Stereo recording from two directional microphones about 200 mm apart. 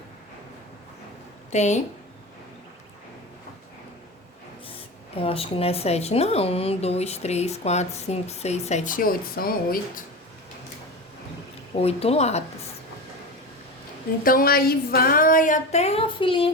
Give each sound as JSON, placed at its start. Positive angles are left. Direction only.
{"t": 1.5, "sound": "speech", "side_deg": 35}
{"t": 5.1, "sound": "speech", "side_deg": 30}
{"t": 11.8, "sound": "speech", "side_deg": 30}
{"t": 14.3, "sound": "speech", "side_deg": 45}